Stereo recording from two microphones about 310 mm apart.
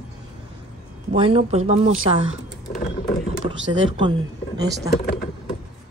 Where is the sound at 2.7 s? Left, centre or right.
Left.